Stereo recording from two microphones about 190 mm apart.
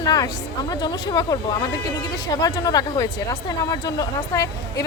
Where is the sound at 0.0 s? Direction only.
20° left (ahead or behind).